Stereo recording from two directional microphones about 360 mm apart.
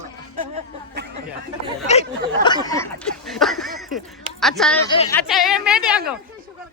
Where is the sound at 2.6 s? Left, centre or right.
Centre.